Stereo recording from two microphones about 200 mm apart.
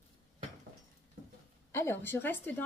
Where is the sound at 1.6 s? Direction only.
10° left (ahead or behind).